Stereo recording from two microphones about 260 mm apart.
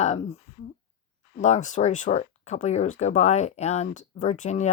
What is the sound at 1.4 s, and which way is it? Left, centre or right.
Speech, left.